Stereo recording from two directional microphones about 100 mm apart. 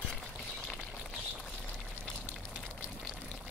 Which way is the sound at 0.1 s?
5° left (ahead or behind).